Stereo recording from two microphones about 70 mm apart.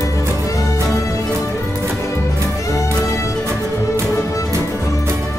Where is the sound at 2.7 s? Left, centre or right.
Left.